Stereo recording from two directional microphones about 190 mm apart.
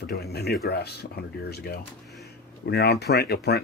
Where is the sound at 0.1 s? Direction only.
60° left (ahead or behind).